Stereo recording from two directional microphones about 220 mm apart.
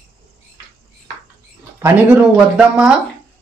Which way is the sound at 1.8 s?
10° right (ahead or behind).